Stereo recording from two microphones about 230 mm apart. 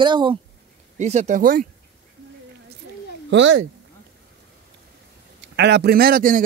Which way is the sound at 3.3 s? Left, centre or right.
Right.